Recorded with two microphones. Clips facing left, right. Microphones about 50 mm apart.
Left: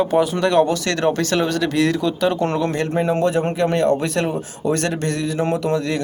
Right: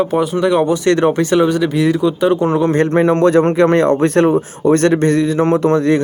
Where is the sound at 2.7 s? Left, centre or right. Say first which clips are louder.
Right 7 dB; right.